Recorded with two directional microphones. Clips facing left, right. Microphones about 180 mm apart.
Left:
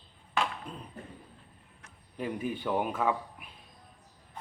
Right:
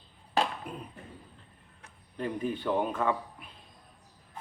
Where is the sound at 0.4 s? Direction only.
35° right (ahead or behind).